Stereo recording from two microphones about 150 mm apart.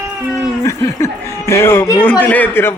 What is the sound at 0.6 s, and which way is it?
Speech, 20° left (ahead or behind).